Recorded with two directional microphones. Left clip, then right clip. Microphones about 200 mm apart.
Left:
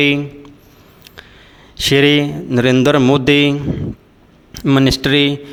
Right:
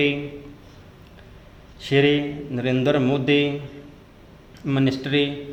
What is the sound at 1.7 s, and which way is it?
Speech, 40° left (ahead or behind).